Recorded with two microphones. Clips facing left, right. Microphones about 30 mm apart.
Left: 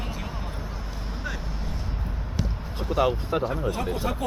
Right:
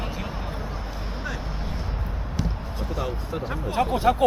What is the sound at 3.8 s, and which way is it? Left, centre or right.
Speech, right.